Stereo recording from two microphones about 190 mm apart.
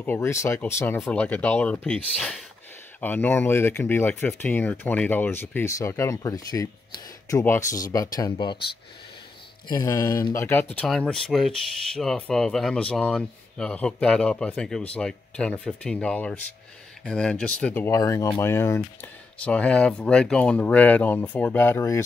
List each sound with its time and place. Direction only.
0.0 s speech: 10° left (ahead or behind)
9.7 s speech: 20° left (ahead or behind)